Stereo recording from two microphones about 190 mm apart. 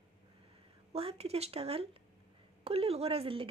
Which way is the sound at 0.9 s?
30° right (ahead or behind).